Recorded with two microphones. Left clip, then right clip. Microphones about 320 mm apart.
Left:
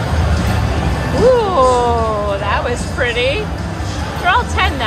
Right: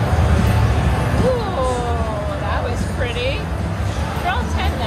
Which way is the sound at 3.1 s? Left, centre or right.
Left.